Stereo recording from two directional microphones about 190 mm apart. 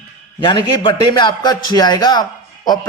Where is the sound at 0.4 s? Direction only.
25° left (ahead or behind).